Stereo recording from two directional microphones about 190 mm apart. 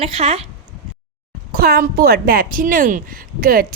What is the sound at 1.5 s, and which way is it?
Speech, 55° right (ahead or behind).